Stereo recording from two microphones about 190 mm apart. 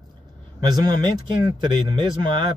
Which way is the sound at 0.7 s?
20° right (ahead or behind).